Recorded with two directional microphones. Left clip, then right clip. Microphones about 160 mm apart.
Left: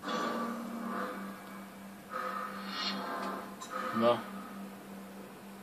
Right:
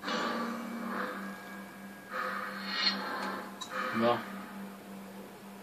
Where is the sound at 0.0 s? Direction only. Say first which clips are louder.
Right 1 dB; 15° right (ahead or behind).